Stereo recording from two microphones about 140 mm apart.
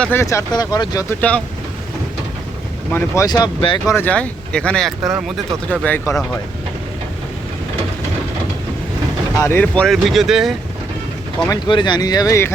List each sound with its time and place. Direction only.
0.0 s speech: 15° left (ahead or behind)
2.9 s speech: 25° left (ahead or behind)
3.9 s speech: 10° left (ahead or behind)
9.4 s speech: 15° left (ahead or behind); by 10.5 s centre (ahead or behind)
11.4 s speech: 30° left (ahead or behind)